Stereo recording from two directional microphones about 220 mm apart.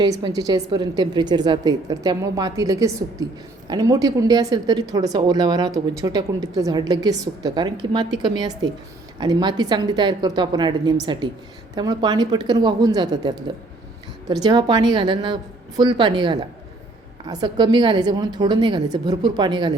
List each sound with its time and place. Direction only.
0.0 s a woman's voice: 20° right (ahead or behind)
14.4 s a woman's voice: 20° right (ahead or behind)